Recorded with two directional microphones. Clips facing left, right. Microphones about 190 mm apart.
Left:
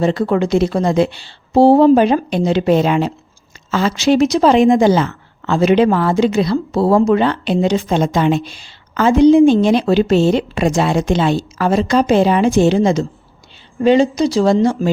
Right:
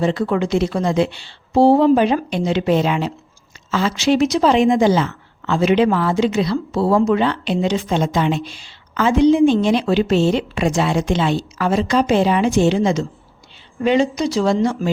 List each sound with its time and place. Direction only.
0.0 s a woman's voice: 40° left (ahead or behind)